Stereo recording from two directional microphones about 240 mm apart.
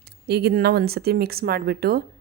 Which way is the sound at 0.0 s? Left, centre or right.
Right.